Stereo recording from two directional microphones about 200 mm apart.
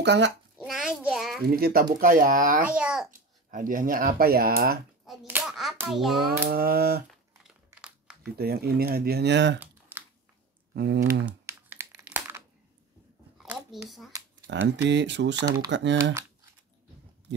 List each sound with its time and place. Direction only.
0.0 s speech: 60° right (ahead or behind)
0.6 s a sound: centre (ahead or behind)
1.5 s speech: 50° right (ahead or behind)
2.7 s babbling: 5° right (ahead or behind)
3.4 s speech: 45° right (ahead or behind)
5.2 s a child's voice: 5° right (ahead or behind)
6.5 s speech: 50° right (ahead or behind)
7.4 s crumpling: 5° right (ahead or behind)
8.4 s speech: 50° right (ahead or behind)
9.6 s typing: 10° right (ahead or behind)
10.7 s speech: 50° right (ahead or behind)
11.2 s crumpling: 10° right (ahead or behind)
13.4 s a sound: centre (ahead or behind)
14.5 s speech: 65° right (ahead or behind)